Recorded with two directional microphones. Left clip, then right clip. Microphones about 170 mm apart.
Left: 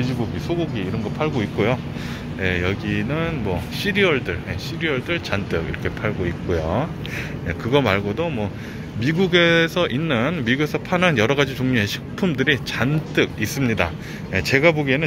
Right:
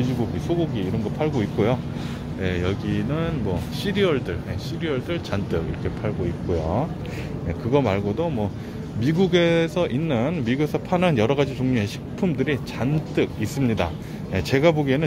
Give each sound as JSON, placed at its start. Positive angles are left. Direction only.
{"t": 0.7, "sound": "speech", "side_deg": -20}
{"t": 2.4, "sound": "speech", "side_deg": -5}
{"t": 7.4, "sound": "speech", "side_deg": -5}
{"t": 8.2, "sound": "speech", "side_deg": -20}